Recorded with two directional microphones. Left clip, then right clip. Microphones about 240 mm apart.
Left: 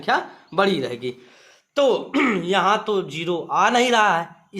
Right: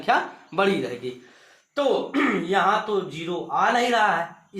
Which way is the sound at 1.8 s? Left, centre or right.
Left.